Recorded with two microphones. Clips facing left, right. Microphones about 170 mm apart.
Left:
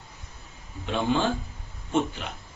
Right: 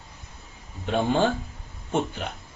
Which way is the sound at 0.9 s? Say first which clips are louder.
Right 2 dB; 50° right (ahead or behind).